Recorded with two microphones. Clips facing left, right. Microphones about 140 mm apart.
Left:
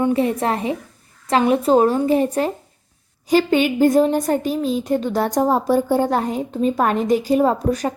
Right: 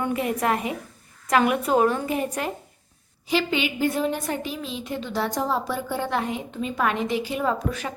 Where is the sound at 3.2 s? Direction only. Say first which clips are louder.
Left 8 dB; 45° left (ahead or behind).